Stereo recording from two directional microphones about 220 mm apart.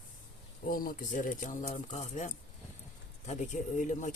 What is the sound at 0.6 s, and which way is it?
Speech, 40° left (ahead or behind).